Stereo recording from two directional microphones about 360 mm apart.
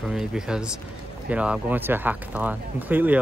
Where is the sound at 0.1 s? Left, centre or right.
Centre.